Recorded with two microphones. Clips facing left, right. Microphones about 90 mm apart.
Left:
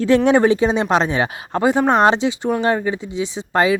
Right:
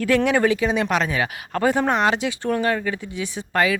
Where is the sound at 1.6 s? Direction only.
20° left (ahead or behind).